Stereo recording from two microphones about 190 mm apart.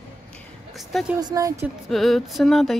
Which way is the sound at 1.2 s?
20° right (ahead or behind).